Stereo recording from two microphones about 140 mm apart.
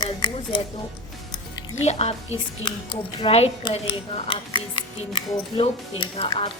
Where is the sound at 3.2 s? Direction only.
45° left (ahead or behind).